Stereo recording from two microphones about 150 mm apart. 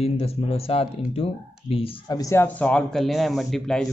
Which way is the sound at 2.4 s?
10° left (ahead or behind).